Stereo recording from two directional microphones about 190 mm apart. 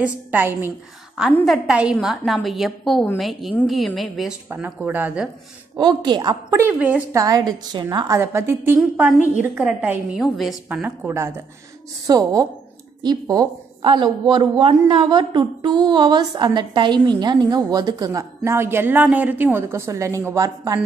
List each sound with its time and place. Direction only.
0.0 s a woman's voice: 10° right (ahead or behind)
1.3 s a woman's voice: centre (ahead or behind)
5.8 s a woman's voice: 25° right (ahead or behind)
6.8 s a woman's voice: 5° right (ahead or behind)
7.2 s a woman's voice: 20° right (ahead or behind)